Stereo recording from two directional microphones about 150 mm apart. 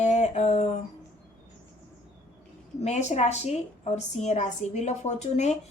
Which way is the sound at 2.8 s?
50° left (ahead or behind).